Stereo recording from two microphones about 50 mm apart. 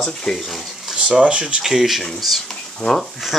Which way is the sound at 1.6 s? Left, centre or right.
Centre.